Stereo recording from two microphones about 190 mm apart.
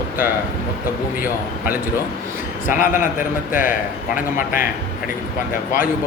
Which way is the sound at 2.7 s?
45° left (ahead or behind).